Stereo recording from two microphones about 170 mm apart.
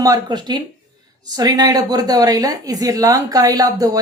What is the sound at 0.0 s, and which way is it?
Speech, 25° right (ahead or behind).